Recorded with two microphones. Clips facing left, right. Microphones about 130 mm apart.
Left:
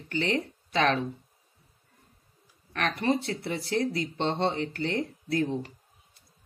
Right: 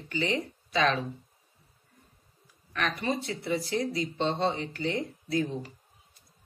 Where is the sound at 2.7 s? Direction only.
55° left (ahead or behind).